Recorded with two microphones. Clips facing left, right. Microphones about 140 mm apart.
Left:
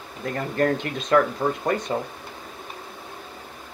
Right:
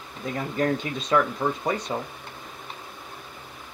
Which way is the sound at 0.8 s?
70° left (ahead or behind).